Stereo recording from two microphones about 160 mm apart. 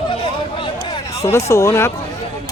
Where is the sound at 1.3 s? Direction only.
20° left (ahead or behind).